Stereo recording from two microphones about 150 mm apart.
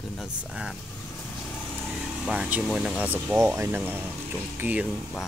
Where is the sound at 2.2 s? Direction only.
5° right (ahead or behind).